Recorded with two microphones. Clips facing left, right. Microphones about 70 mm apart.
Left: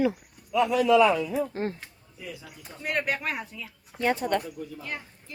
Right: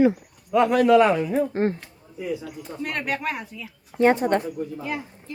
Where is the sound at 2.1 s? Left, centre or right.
Centre.